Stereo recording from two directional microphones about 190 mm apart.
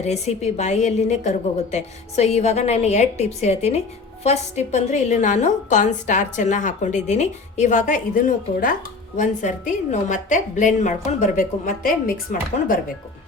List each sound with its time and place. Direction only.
0.0 s a woman's voice: 35° left (ahead or behind)